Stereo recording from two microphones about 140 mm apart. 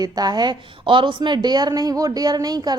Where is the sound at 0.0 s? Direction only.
30° right (ahead or behind).